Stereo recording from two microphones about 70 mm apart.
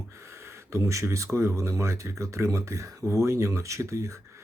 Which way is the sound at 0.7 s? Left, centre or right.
Right.